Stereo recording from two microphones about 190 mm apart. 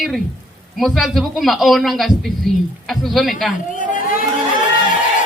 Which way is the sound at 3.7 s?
45° left (ahead or behind).